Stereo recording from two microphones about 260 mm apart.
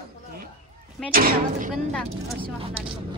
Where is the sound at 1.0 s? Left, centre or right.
Right.